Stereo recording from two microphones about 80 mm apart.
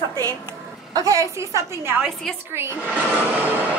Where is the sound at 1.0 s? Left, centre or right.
Right.